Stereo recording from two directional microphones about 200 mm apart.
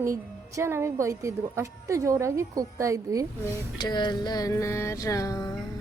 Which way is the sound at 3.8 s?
20° left (ahead or behind).